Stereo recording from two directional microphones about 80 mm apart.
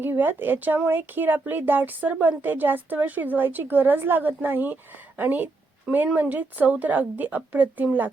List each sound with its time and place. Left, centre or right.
0.0 s a woman's voice: right